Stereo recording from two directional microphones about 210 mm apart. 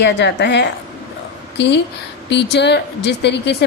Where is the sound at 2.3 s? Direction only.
55° left (ahead or behind).